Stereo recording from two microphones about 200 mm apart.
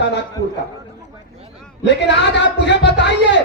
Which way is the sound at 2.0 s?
60° left (ahead or behind).